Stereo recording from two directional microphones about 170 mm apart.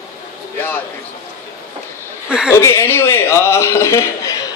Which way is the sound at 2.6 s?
15° left (ahead or behind).